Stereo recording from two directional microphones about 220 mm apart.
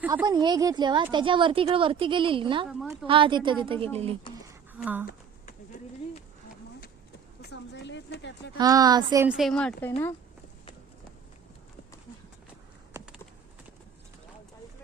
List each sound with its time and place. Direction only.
0.0 s speech: 5° right (ahead or behind)
0.3 s a woman's voice: 20° right (ahead or behind)
4.8 s a woman's voice: 5° right (ahead or behind)
7.4 s a sound: 50° left (ahead or behind)
8.5 s a woman's voice: 15° right (ahead or behind)
9.2 s a woman's voice: centre (ahead or behind)
12.9 s typing: 15° right (ahead or behind)